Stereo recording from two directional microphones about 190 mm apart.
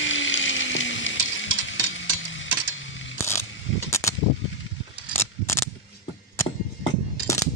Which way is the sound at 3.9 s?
15° left (ahead or behind).